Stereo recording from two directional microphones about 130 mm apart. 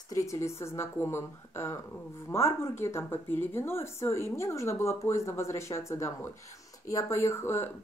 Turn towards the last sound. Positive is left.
turn(degrees=20)  # may be behind; listen again after turning